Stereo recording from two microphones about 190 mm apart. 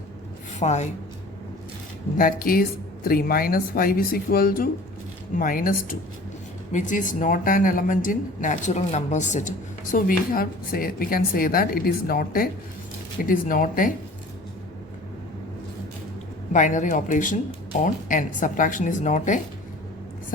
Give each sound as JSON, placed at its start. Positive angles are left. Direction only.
{"t": 0.6, "sound": "speech", "side_deg": 35}
{"t": 2.1, "sound": "speech", "side_deg": 50}
{"t": 16.5, "sound": "speech", "side_deg": 40}